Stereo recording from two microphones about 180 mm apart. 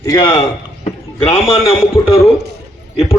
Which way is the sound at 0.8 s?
35° left (ahead or behind).